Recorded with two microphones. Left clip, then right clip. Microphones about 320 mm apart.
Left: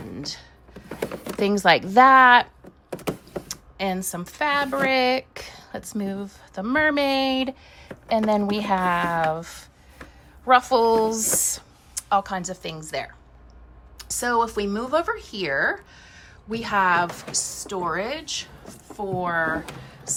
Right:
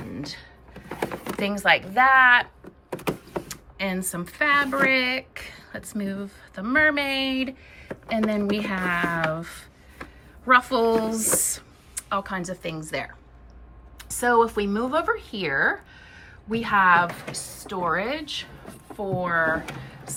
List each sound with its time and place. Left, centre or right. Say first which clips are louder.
0.2 s speech: left 4 dB; centre
0.9 s a sound: right 1 dB; centre
1.4 s speech: left 3 dB; centre
2.9 s vehicle: right 1 dB; centre
3.5 s speech: left 4 dB; centre